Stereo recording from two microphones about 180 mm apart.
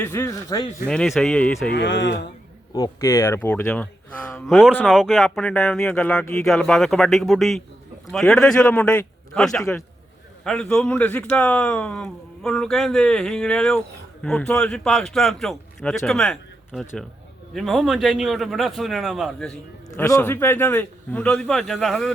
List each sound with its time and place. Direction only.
0.0 s a man's voice: 15° left (ahead or behind)
0.9 s speech: centre (ahead or behind)
1.7 s speech: 80° left
2.7 s speech: 15° left (ahead or behind)
4.9 s speech: centre (ahead or behind)
20.0 s a man's voice: 15° left (ahead or behind)